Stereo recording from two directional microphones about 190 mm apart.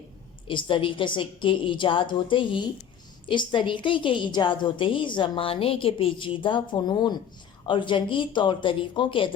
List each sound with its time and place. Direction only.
0.4 s a woman's voice: 25° left (ahead or behind)